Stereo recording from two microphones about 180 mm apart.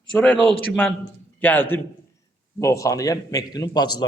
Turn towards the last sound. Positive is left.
turn(degrees=25)  # may be behind; listen again after turning